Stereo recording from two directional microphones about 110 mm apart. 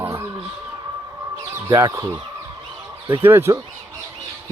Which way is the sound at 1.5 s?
25° right (ahead or behind).